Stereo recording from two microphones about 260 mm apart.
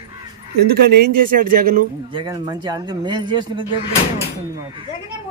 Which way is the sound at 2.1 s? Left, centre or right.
Centre.